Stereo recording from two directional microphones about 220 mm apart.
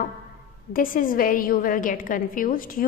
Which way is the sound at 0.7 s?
40° left (ahead or behind).